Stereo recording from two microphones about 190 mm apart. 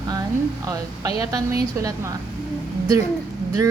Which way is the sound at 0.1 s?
20° right (ahead or behind).